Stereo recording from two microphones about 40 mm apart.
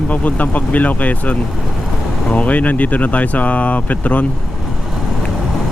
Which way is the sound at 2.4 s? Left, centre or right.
Left.